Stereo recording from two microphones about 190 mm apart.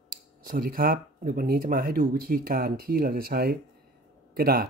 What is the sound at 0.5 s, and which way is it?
Speech, 50° right (ahead or behind).